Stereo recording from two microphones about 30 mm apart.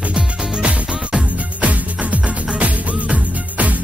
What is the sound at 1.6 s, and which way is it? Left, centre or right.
Music, right.